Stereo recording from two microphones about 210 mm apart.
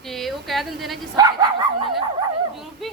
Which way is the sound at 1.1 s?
15° right (ahead or behind).